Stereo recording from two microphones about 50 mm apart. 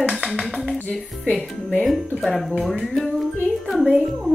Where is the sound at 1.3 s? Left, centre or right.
Centre.